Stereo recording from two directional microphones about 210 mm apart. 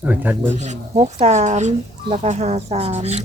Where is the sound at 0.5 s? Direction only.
35° right (ahead or behind).